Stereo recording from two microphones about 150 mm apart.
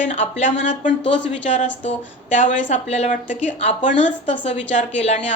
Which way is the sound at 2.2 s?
55° left (ahead or behind).